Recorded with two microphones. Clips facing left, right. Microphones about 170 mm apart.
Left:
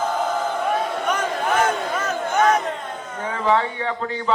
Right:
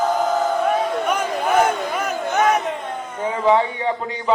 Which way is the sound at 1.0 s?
10° right (ahead or behind).